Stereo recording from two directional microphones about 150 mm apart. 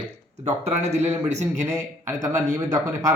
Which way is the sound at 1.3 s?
50° right (ahead or behind).